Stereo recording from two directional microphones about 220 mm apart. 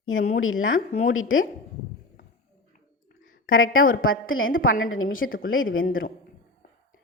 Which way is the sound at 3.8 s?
40° left (ahead or behind).